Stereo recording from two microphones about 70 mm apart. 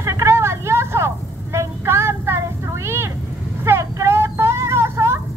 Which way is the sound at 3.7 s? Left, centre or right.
Right.